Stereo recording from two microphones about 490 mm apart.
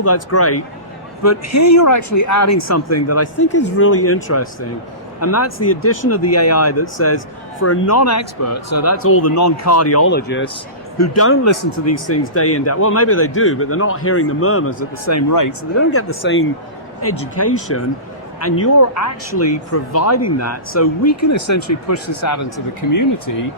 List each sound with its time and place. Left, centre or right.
0.0 s speech: left
10.9 s speech: left